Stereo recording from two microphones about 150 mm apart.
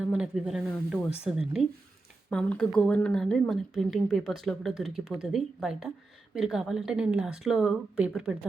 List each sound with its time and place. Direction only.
0.0 s speech: 5° right (ahead or behind)